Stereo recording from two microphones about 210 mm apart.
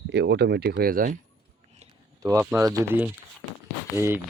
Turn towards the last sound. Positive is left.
turn(degrees=-10)  # may be behind; listen again after turning